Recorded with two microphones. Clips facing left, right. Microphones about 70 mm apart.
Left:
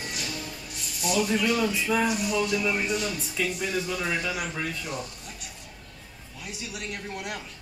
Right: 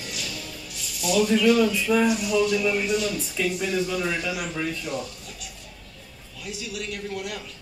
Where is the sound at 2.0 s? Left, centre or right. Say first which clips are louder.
Right 4 dB; left.